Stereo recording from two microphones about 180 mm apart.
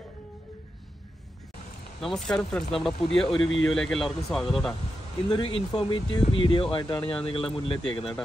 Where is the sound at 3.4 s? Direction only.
90° left.